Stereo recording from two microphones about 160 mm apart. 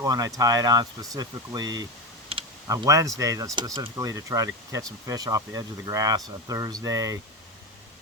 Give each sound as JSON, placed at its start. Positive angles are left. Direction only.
{"t": 0.0, "sound": "speech", "side_deg": -20}
{"t": 2.3, "sound": "computer keyboard", "side_deg": -35}
{"t": 2.6, "sound": "speech", "side_deg": -20}